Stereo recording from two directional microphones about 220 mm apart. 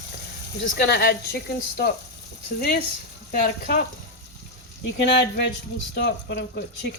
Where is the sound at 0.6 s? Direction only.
50° left (ahead or behind).